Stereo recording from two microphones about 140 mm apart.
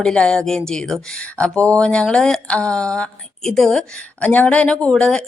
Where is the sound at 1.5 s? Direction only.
20° right (ahead or behind).